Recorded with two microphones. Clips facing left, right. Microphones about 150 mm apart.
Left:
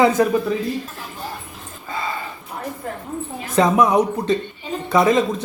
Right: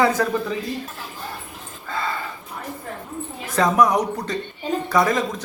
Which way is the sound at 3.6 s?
25° left (ahead or behind).